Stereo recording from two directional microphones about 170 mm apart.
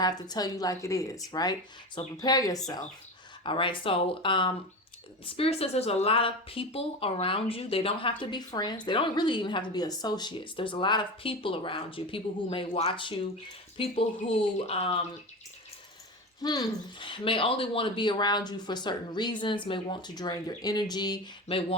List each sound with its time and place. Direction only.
0.0 s speech: 25° left (ahead or behind)
16.4 s speech: 25° left (ahead or behind)
21.4 s speech: 35° left (ahead or behind)